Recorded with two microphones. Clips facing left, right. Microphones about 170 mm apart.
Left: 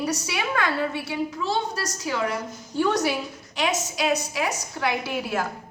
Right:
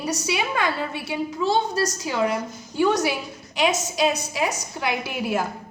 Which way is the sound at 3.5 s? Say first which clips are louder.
Right 4 dB; 20° right (ahead or behind).